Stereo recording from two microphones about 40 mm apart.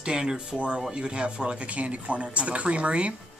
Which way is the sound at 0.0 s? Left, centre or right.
Centre.